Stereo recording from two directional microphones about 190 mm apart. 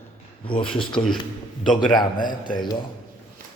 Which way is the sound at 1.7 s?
25° left (ahead or behind).